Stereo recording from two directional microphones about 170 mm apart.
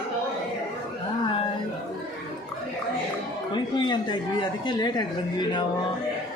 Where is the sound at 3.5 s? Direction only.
25° left (ahead or behind).